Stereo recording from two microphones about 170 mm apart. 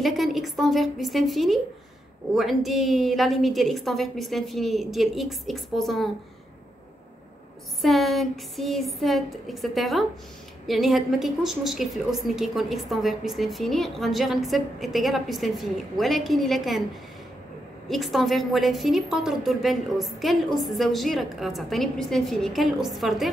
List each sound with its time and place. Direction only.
0.0 s a woman's voice: centre (ahead or behind)
7.8 s a woman's voice: centre (ahead or behind)
17.8 s a woman's voice: centre (ahead or behind)